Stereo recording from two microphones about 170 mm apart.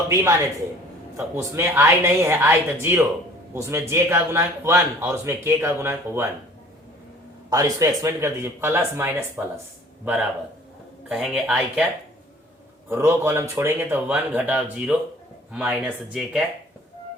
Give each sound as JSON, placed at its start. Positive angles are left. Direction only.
{"t": 1.1, "sound": "a man's voice", "side_deg": -15}
{"t": 7.5, "sound": "a man's voice", "side_deg": -20}
{"t": 12.9, "sound": "a man's voice", "side_deg": -15}